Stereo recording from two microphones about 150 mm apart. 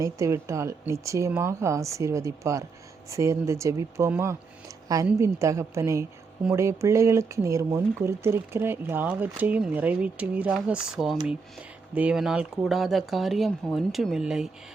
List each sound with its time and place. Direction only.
0.0 s a woman's voice: 20° right (ahead or behind); by 14.5 s 5° right (ahead or behind)